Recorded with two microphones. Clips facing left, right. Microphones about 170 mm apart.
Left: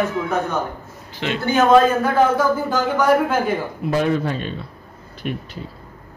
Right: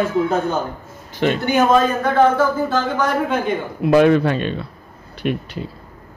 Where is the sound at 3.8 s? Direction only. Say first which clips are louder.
Right 7 dB; 80° right.